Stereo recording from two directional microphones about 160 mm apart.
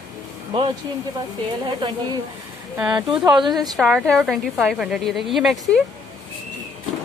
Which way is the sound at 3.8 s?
Centre (ahead or behind).